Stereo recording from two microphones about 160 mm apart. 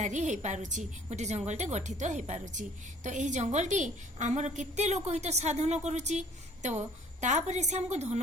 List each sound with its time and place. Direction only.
0.0 s a woman's voice: 50° right (ahead or behind)